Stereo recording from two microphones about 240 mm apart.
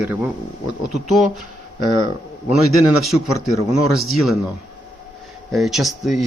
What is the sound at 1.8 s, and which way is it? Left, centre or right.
Speech, right.